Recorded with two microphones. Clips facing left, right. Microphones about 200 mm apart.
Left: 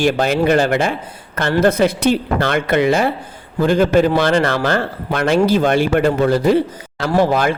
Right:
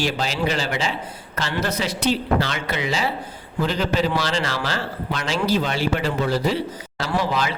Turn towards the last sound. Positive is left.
turn(degrees=50)  # may be behind; listen again after turning